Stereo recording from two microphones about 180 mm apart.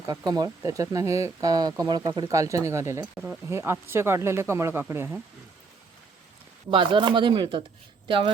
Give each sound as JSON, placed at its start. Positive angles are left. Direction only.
{"t": 0.0, "sound": "speech", "side_deg": -20}
{"t": 6.7, "sound": "speech", "side_deg": -25}